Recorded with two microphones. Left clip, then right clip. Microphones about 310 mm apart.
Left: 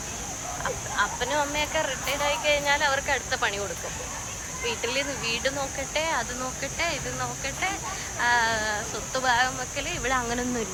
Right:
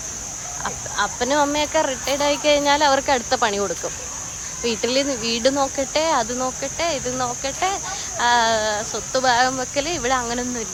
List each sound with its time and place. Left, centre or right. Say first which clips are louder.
0.9 s speech: right 6 dB; centre
4.6 s speech: right 7 dB; centre